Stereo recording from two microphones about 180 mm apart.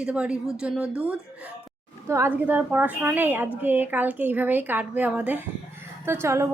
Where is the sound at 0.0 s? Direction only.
5° right (ahead or behind).